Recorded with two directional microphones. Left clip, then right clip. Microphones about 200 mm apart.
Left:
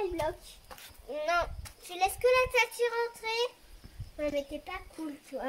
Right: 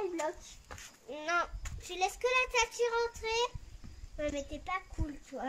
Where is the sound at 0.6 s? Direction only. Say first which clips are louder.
Left 2 dB; 30° right (ahead or behind).